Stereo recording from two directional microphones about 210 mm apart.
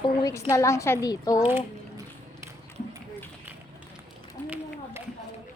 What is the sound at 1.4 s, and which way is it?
Speech, 10° right (ahead or behind).